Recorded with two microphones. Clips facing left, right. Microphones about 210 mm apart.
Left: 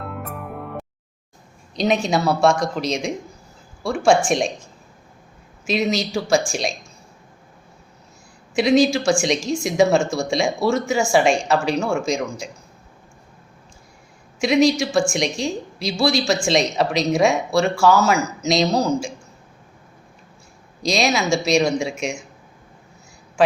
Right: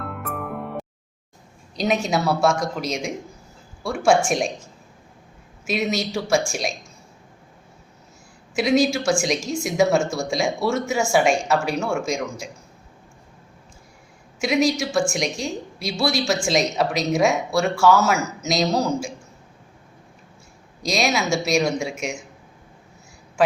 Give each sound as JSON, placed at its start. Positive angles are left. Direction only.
{"t": 1.7, "sound": "a woman's voice", "side_deg": -5}
{"t": 5.6, "sound": "a woman's voice", "side_deg": -5}
{"t": 8.5, "sound": "a woman's voice", "side_deg": -5}
{"t": 14.3, "sound": "a woman's voice", "side_deg": -5}
{"t": 20.9, "sound": "a woman's voice", "side_deg": -5}